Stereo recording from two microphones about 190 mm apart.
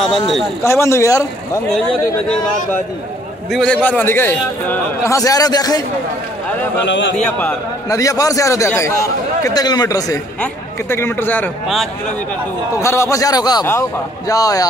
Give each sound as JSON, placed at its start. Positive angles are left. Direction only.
{"t": 0.7, "sound": "a man's voice", "side_deg": 15}
{"t": 2.2, "sound": "a man's voice", "side_deg": 5}
{"t": 6.9, "sound": "speech", "side_deg": 65}
{"t": 7.3, "sound": "a man's voice", "side_deg": 15}
{"t": 11.6, "sound": "a man's voice", "side_deg": 0}
{"t": 12.7, "sound": "a man's voice", "side_deg": 15}